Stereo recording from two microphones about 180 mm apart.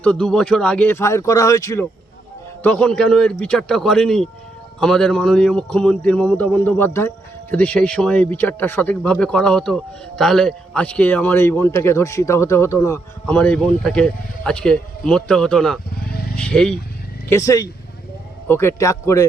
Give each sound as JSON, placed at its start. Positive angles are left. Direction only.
{"t": 0.0, "sound": "speech", "side_deg": 5}
{"t": 2.6, "sound": "speech", "side_deg": 5}
{"t": 17.2, "sound": "speech", "side_deg": 15}